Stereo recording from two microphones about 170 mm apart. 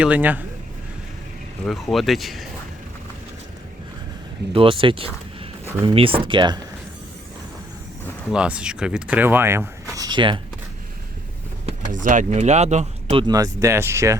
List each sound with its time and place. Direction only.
0.0 s speech: 10° right (ahead or behind)
1.6 s speech: centre (ahead or behind)
4.5 s speech: 30° right (ahead or behind)
8.3 s speech: 5° right (ahead or behind); by 10.4 s 30° right (ahead or behind)
11.6 s speech: 50° right (ahead or behind)
13.2 s speech: 20° right (ahead or behind)